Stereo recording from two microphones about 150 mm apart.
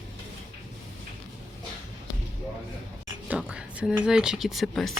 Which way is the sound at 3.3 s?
10° right (ahead or behind).